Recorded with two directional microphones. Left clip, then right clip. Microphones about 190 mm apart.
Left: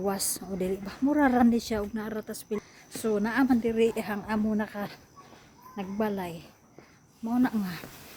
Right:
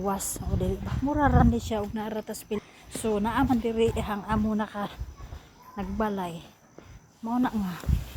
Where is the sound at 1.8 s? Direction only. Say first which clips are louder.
Right 2 dB; 10° left (ahead or behind).